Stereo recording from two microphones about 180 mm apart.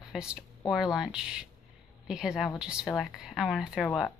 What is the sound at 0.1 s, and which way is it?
Speech, centre (ahead or behind).